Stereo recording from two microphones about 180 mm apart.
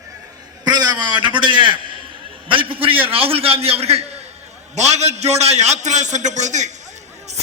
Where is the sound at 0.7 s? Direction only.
25° right (ahead or behind).